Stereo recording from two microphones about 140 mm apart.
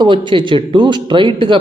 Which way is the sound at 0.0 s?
35° right (ahead or behind).